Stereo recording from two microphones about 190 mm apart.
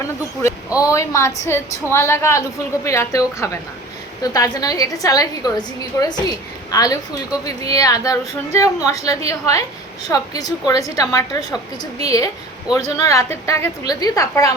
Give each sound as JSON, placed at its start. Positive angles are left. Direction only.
{"t": 0.8, "sound": "a woman's voice", "side_deg": 15}